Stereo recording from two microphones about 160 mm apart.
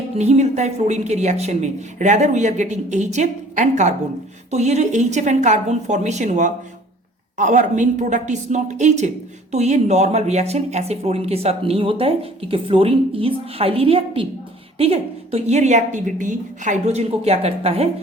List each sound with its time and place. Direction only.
0.2 s a woman's voice: 45° right (ahead or behind)